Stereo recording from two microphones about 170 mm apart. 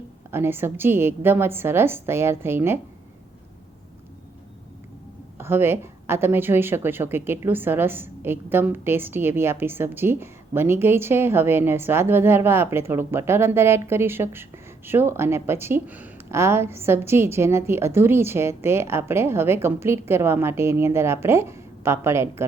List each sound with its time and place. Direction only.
0.3 s speech: 15° right (ahead or behind)
5.4 s speech: 15° right (ahead or behind)